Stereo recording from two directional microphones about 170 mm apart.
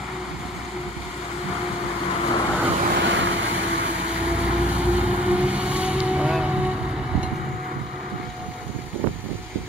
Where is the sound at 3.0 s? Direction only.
90° right.